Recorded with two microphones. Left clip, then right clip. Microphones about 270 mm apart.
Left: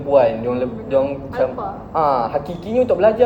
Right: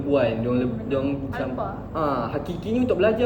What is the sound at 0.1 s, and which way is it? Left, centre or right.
Speech, centre.